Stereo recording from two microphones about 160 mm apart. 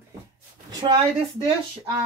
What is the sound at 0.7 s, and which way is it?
Speech, 25° right (ahead or behind).